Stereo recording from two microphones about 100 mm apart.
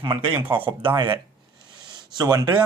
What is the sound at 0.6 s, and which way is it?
Speech, 55° right (ahead or behind).